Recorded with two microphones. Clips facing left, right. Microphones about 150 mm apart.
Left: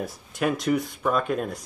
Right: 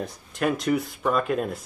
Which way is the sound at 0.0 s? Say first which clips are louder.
Even; 5° left (ahead or behind).